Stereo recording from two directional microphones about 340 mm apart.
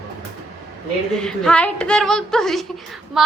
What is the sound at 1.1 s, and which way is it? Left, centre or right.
Speech, centre.